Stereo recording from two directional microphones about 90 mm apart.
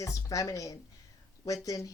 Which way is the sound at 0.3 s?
40° left (ahead or behind).